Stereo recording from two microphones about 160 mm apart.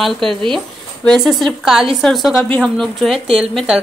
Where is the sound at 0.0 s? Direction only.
Centre (ahead or behind).